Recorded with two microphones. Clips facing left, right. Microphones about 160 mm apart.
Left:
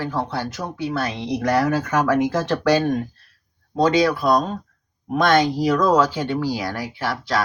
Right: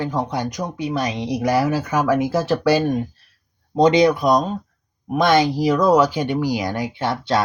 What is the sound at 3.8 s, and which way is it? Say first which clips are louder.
Speech: right 3 dB; 20° right (ahead or behind).